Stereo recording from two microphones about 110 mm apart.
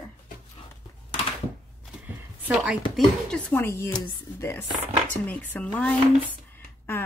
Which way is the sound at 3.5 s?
20° left (ahead or behind).